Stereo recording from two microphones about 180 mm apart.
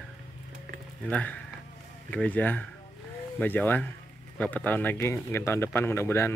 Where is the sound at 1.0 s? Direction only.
10° left (ahead or behind).